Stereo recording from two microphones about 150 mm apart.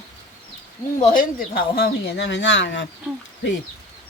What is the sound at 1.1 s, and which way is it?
A woman's voice, 75° left (ahead or behind).